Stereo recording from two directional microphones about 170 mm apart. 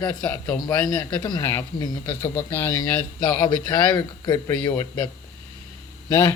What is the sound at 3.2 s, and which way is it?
Speech, 25° left (ahead or behind).